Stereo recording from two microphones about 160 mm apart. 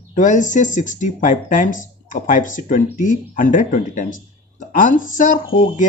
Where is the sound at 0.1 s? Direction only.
50° left (ahead or behind).